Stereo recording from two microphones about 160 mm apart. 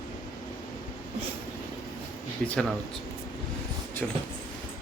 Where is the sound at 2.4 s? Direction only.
5° left (ahead or behind).